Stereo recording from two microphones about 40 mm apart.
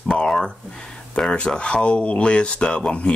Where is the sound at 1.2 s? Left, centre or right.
Centre.